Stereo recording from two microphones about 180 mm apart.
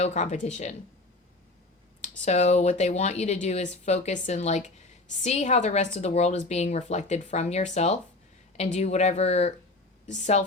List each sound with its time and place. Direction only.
0.0 s a woman's voice: 40° left (ahead or behind)
2.2 s a woman's voice: 40° left (ahead or behind)